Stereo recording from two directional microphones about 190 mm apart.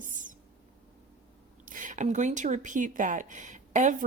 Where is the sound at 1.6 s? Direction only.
45° right (ahead or behind).